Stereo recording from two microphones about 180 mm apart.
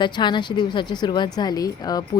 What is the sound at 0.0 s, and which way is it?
A woman's voice, 25° left (ahead or behind).